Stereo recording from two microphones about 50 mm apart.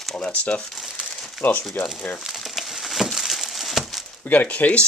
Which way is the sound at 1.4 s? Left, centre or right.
Left.